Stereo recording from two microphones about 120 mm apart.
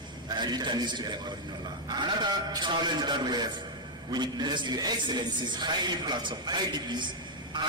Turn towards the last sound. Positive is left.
turn(degrees=-40)  # may be behind; listen again after turning